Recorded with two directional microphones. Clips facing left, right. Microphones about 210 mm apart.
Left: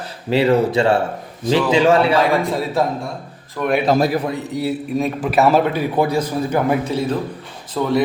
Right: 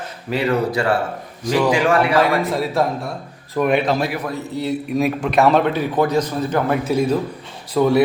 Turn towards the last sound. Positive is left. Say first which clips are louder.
# right 5 dB
turn(degrees=-5)  # may be behind; listen again after turning